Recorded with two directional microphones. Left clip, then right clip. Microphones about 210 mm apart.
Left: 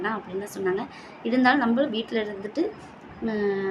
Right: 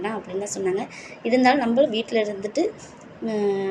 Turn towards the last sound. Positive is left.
turn(degrees=-5)  # may be behind; listen again after turning